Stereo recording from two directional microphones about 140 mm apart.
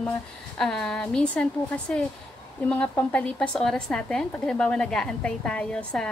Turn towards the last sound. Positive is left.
turn(degrees=5)  # may be behind; listen again after turning